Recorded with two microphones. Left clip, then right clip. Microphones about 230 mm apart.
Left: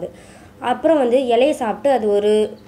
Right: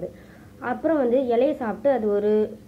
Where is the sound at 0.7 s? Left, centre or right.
Left.